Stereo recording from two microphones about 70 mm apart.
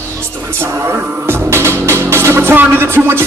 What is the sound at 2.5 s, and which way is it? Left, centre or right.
Speech, right.